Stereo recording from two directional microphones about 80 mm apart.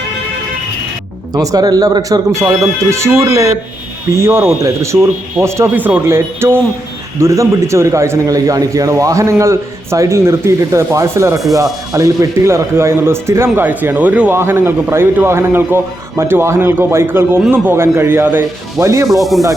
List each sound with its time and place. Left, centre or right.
1.3 s a man's voice: right
5.7 s a man's voice: right
13.7 s speech: centre
14.3 s a man's voice: right
19.0 s sanding: centre